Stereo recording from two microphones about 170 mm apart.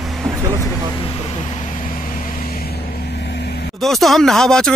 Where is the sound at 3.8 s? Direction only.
Centre (ahead or behind).